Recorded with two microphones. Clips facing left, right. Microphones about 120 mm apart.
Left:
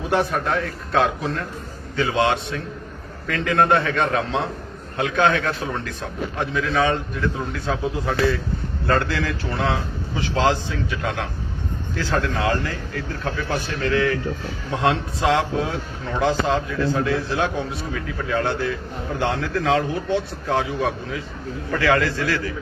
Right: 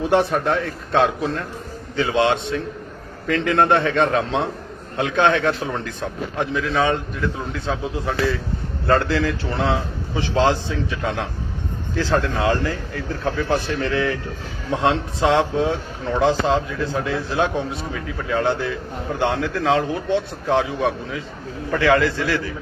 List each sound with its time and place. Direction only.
0.0 s speech: 25° right (ahead or behind)